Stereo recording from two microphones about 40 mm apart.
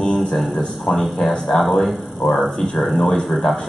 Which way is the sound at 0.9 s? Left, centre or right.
Centre.